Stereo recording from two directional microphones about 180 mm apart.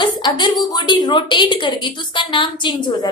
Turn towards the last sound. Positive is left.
turn(degrees=25)  # may be behind; listen again after turning